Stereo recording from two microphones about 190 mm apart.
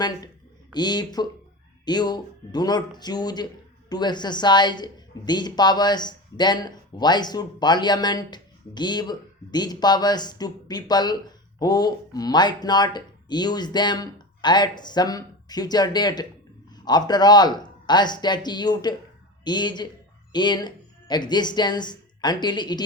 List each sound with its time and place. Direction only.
0.0 s a woman's voice: 20° left (ahead or behind)